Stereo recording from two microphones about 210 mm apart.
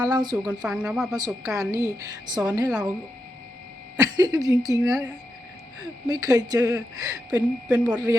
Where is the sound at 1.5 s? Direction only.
15° right (ahead or behind).